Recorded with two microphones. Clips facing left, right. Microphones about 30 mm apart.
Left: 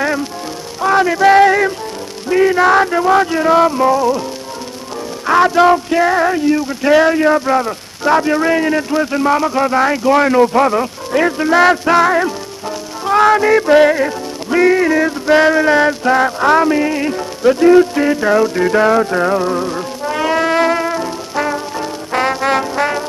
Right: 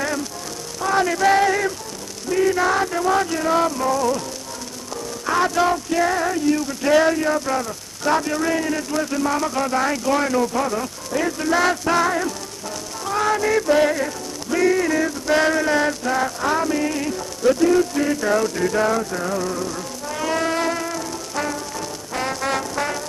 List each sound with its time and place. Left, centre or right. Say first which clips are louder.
0.0 s music: left 7 dB; left
0.7 s a sound: left 7 dB; left
2.2 s music: left 7 dB; left
5.2 s music: left 9 dB; left